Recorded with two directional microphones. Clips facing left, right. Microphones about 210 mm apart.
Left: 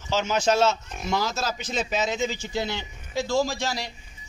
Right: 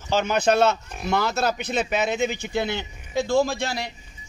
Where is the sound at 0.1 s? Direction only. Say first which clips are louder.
Right 2 dB; 55° right (ahead or behind).